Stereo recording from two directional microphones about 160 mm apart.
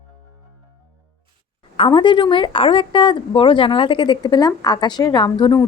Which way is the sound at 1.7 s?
30° left (ahead or behind).